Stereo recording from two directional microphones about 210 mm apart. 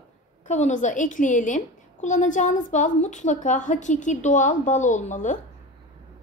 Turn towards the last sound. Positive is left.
turn(degrees=35)  # may be behind; listen again after turning